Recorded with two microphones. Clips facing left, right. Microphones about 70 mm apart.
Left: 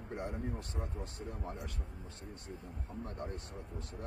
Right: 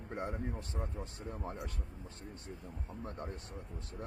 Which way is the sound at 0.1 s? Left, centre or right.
Right.